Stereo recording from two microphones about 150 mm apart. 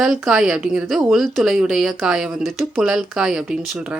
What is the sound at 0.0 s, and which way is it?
A woman's voice, 5° right (ahead or behind).